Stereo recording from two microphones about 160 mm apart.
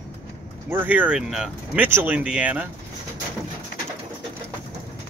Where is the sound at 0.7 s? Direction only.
10° right (ahead or behind).